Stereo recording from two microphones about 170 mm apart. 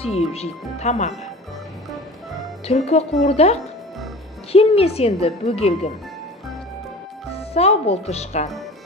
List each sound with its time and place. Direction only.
0.0 s a woman's voice: 35° left (ahead or behind)
2.6 s a woman's voice: 35° left (ahead or behind)
7.3 s a woman's voice: 35° left (ahead or behind)